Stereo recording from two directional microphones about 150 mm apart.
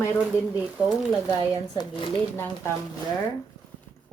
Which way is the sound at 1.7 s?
30° left (ahead or behind).